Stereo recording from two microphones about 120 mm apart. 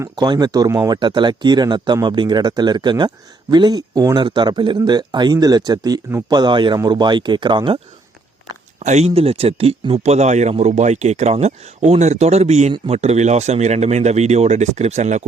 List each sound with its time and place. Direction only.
0.0 s speech: 35° right (ahead or behind)
8.8 s speech: 70° right (ahead or behind)